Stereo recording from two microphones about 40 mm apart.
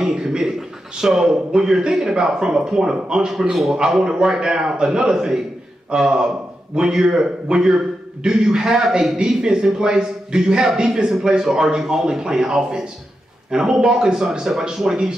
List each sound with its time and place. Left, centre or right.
0.0 s a man's voice: centre